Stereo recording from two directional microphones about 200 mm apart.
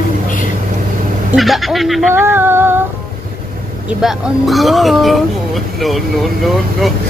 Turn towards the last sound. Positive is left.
turn(degrees=0)  # may be behind; listen again after turning